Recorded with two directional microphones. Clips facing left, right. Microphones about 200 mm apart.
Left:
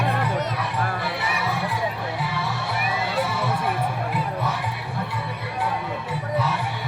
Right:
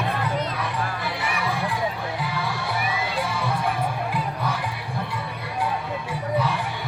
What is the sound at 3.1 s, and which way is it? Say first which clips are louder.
Music: left 2 dB; 5° left (ahead or behind).